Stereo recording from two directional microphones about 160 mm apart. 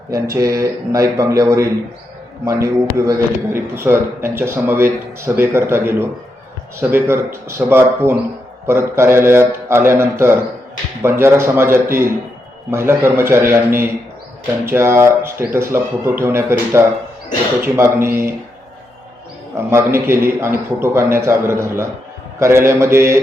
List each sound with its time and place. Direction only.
0.1 s a man's voice: 20° right (ahead or behind)
19.5 s a man's voice: 15° right (ahead or behind)